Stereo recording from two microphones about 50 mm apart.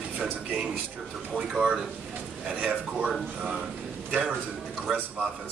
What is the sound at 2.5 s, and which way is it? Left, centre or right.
Speech, right.